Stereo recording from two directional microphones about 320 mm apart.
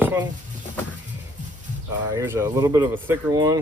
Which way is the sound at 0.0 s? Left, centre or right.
Centre.